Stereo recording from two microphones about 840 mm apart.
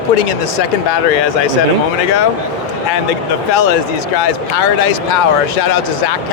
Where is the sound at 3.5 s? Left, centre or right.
Left.